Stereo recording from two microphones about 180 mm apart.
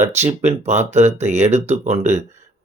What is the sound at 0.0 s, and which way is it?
Speech, 40° right (ahead or behind).